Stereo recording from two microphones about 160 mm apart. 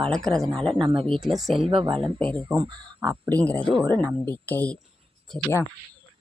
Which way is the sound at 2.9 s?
15° right (ahead or behind).